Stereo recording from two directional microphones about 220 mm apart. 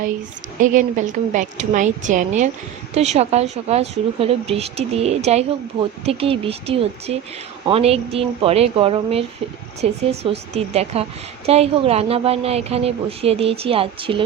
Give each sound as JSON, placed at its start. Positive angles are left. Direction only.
{"t": 0.6, "sound": "a woman's voice", "side_deg": -35}